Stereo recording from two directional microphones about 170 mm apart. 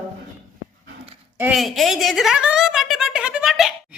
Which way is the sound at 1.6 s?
Centre (ahead or behind).